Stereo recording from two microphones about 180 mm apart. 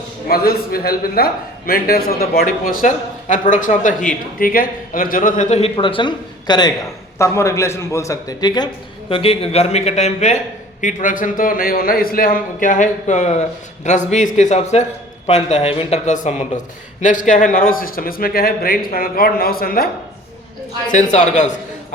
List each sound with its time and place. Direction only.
0.3 s a man's voice: 55° left (ahead or behind)
20.9 s speech: 40° left (ahead or behind)